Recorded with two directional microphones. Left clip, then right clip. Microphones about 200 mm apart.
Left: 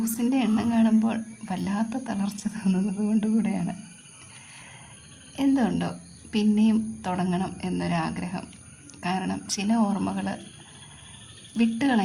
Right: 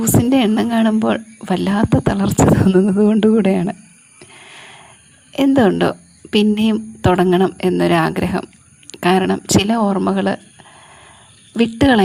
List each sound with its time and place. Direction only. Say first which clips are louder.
0.0 s speech: right 11 dB; 45° right (ahead or behind)
4.5 s a sound: right 9 dB; 45° right (ahead or behind)
5.3 s speech: right 11 dB; 45° right (ahead or behind)
11.5 s speech: right 11 dB; 40° right (ahead or behind)